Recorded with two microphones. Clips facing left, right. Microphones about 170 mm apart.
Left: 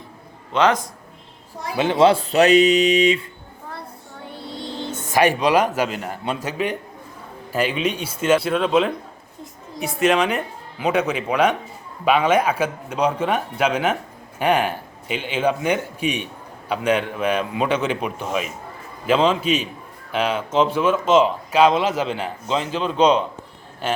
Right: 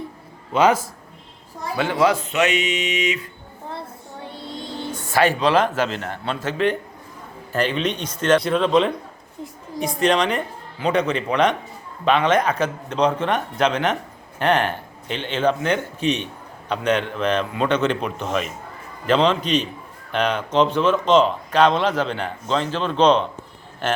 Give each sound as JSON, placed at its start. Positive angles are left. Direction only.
{"t": 0.5, "sound": "a man's voice", "side_deg": -5}
{"t": 1.7, "sound": "speech", "side_deg": 20}
{"t": 4.9, "sound": "speech", "side_deg": 20}